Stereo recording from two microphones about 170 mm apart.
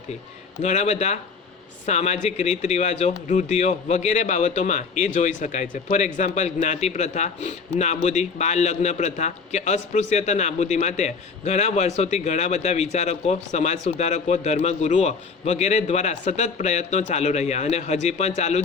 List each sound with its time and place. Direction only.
0.6 s speech: 45° left (ahead or behind)